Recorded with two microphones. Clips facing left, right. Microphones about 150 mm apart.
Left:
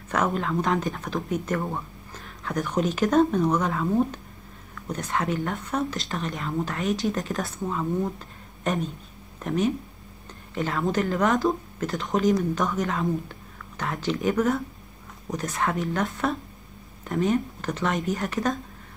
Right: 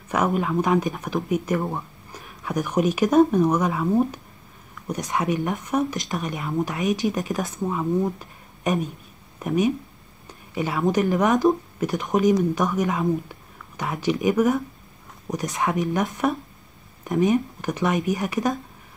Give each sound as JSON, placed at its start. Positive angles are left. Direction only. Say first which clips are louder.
{"t": 0.1, "sound": "speech", "louder": "right 3 dB", "side_deg": -15}